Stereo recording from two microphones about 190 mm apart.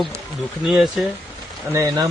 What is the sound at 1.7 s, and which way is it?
Speech, 15° right (ahead or behind).